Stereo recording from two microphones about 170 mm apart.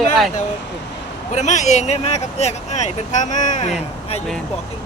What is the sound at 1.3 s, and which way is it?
Speech, 45° left (ahead or behind).